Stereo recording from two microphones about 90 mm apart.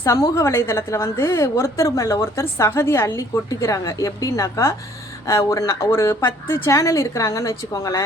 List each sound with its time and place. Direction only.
0.0 s a woman's voice: 35° left (ahead or behind)